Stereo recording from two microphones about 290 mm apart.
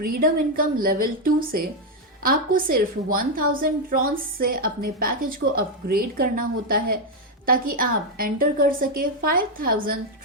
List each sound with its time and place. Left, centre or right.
0.0 s a woman's voice: right